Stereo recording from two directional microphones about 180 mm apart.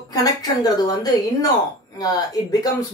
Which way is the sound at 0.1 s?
20° left (ahead or behind).